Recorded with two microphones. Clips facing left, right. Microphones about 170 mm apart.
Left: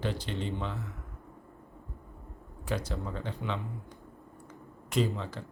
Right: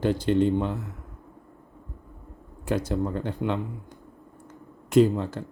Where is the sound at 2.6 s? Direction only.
50° right (ahead or behind).